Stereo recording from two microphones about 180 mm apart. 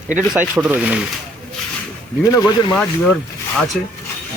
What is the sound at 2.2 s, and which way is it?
Speech, 20° left (ahead or behind).